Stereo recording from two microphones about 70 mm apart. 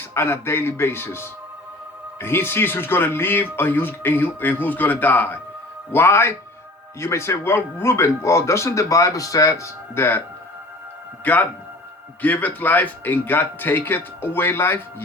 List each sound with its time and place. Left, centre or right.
0.1 s a man's voice: left
9.9 s a man's voice: left